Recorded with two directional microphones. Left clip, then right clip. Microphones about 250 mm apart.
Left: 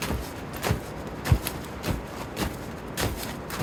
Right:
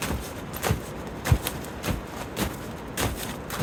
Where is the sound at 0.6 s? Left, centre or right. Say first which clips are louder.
Right 1 dB; centre.